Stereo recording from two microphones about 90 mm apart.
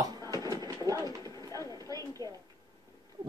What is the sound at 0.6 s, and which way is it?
Pigeon, 40° right (ahead or behind).